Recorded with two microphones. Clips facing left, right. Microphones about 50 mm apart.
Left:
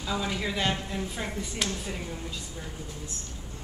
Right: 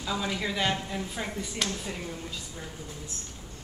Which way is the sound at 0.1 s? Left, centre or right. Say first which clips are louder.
Even; centre.